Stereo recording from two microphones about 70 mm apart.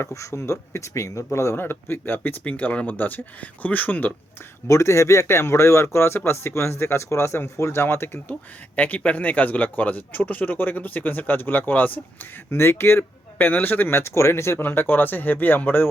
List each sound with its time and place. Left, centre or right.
0.0 s a man's voice: left
4.7 s speech: left
8.7 s a man's voice: left